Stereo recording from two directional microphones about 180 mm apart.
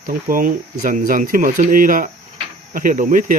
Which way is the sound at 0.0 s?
50° right (ahead or behind).